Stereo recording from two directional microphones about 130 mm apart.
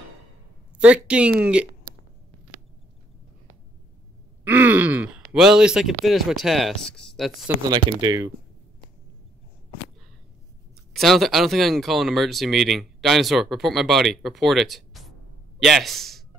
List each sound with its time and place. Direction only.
0.7 s speech: 10° right (ahead or behind)
4.5 s speech: 10° right (ahead or behind)
7.7 s speech: 30° right (ahead or behind)
10.9 s speech: centre (ahead or behind)